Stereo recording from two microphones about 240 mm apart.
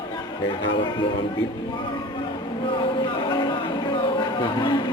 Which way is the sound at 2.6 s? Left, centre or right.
Centre.